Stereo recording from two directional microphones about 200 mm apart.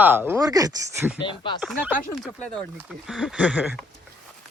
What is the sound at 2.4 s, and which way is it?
Speech, 5° left (ahead or behind).